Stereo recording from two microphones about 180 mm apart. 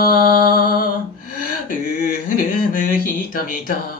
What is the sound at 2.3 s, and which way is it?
Speech, 45° left (ahead or behind).